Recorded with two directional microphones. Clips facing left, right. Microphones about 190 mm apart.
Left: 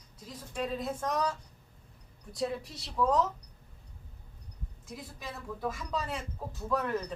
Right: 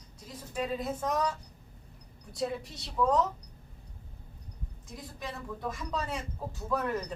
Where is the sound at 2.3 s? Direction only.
Centre (ahead or behind).